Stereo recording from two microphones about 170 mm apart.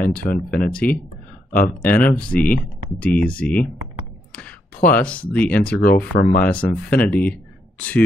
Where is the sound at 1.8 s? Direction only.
10° left (ahead or behind).